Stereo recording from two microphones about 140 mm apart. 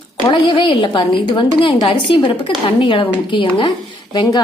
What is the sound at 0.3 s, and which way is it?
A woman's voice, 40° left (ahead or behind).